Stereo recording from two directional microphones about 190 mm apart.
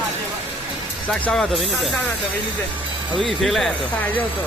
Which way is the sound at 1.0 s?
5° left (ahead or behind).